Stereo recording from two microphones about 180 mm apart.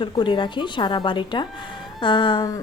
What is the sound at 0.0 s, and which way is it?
A woman's voice, 25° left (ahead or behind).